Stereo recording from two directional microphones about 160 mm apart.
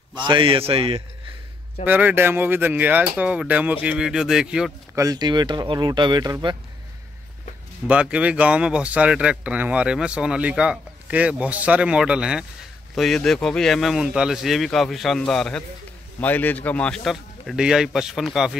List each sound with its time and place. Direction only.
0.2 s a man's voice: 30° right (ahead or behind)
1.9 s speech: 10° right (ahead or behind)
4.9 s speech: 25° right (ahead or behind)
7.8 s speech: 10° right (ahead or behind)